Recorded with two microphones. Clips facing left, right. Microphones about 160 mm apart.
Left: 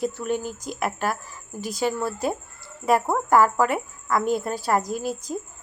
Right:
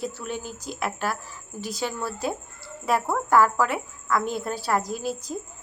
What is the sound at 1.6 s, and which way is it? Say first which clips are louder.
Speech: left 5 dB; 50° left (ahead or behind).